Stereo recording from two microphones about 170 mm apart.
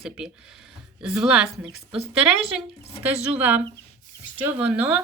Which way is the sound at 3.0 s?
10° right (ahead or behind).